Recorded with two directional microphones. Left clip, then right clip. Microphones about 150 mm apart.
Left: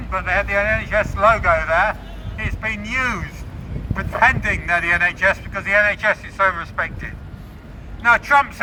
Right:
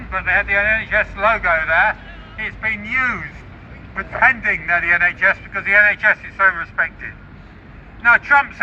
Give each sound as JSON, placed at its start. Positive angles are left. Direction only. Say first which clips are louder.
{"t": 0.1, "sound": "a man's voice", "louder": "right 3 dB", "side_deg": 30}